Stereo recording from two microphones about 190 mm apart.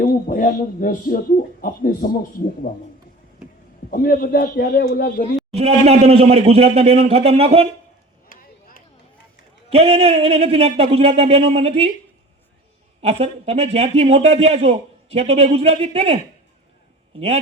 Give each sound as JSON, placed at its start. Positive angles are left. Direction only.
{"t": 0.0, "sound": "a man's voice", "side_deg": 45}
{"t": 3.9, "sound": "a man's voice", "side_deg": 50}
{"t": 5.5, "sound": "a man's voice", "side_deg": -35}
{"t": 8.3, "sound": "chop", "side_deg": 50}
{"t": 9.6, "sound": "a man's voice", "side_deg": -35}
{"t": 13.0, "sound": "a man's voice", "side_deg": -30}